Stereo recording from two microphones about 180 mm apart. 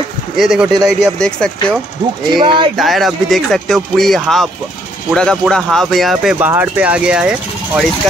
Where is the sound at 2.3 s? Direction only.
25° right (ahead or behind).